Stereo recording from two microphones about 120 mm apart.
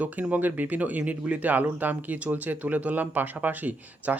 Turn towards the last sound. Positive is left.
turn(degrees=-15)  # may be behind; listen again after turning